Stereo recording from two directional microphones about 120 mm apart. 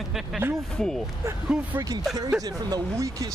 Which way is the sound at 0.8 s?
5° left (ahead or behind).